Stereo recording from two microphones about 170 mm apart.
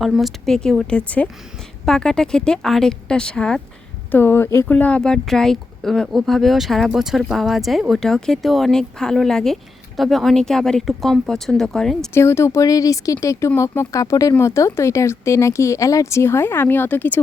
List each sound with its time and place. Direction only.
0.0 s speech: centre (ahead or behind)
12.1 s speech: 15° left (ahead or behind)